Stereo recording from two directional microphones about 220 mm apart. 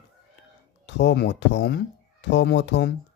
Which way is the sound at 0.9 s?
55° left (ahead or behind).